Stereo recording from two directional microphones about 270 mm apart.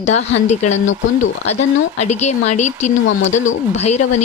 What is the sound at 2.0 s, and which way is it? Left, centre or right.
Speech, left.